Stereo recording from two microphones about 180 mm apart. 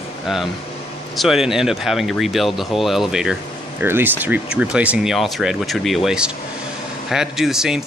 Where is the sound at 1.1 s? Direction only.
Centre (ahead or behind).